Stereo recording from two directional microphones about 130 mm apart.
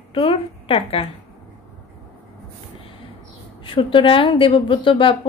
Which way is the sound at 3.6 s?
40° left (ahead or behind).